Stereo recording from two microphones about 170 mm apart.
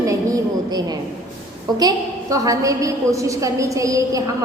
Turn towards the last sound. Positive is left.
turn(degrees=-20)  # may be behind; listen again after turning